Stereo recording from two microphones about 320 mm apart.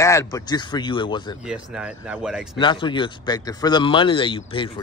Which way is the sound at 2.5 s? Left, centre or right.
Centre.